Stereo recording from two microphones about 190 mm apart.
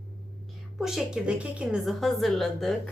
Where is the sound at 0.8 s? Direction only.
Centre (ahead or behind).